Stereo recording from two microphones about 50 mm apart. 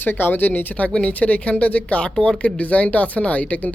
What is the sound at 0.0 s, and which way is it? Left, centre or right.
Speech, left.